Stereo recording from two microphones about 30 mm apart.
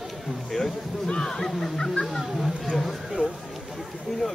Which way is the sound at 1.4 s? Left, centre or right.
Centre.